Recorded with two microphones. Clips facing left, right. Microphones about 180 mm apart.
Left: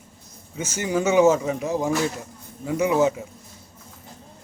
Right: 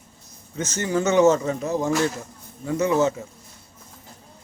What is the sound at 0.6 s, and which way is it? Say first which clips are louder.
Speech: even; 10° left (ahead or behind).